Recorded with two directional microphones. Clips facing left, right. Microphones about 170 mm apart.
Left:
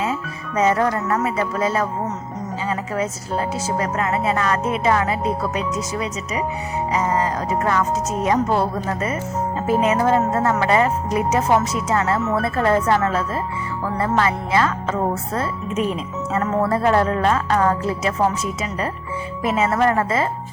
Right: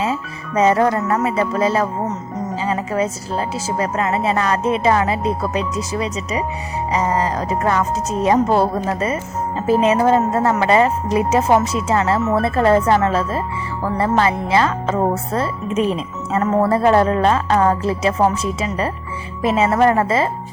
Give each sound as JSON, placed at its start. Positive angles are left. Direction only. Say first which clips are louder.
{"t": 0.0, "sound": "a woman's voice", "louder": "right 2 dB", "side_deg": -30}